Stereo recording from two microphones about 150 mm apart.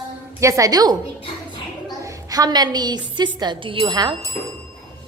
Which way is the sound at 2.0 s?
20° right (ahead or behind).